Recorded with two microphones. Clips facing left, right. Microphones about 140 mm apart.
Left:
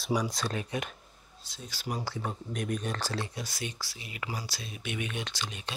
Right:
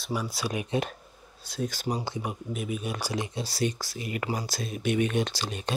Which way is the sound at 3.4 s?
35° right (ahead or behind).